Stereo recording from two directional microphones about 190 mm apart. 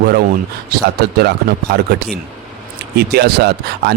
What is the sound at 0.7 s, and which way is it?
Speech, 60° right (ahead or behind).